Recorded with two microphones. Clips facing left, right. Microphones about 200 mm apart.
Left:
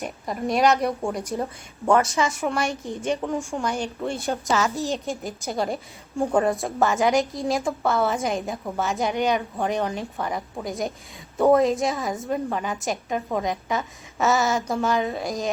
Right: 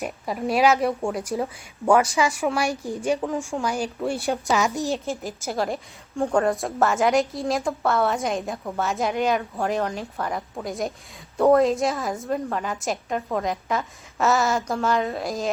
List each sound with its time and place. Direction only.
0.0 s a woman's voice: 5° right (ahead or behind)
4.9 s a woman's voice: centre (ahead or behind)